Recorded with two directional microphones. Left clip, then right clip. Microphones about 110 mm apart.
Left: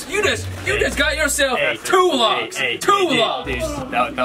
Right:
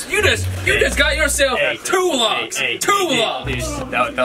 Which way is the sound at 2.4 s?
25° left (ahead or behind).